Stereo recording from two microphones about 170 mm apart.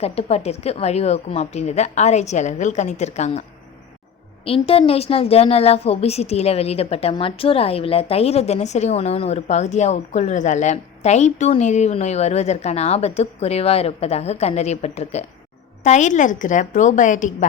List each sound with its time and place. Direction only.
0.0 s a woman's voice: 35° left (ahead or behind)
4.4 s a woman's voice: 35° left (ahead or behind)